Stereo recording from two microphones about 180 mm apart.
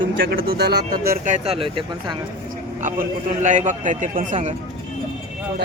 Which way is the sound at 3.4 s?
45° right (ahead or behind).